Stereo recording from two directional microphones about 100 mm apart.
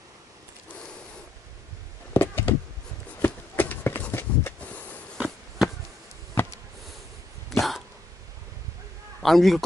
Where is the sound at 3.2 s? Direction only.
20° left (ahead or behind).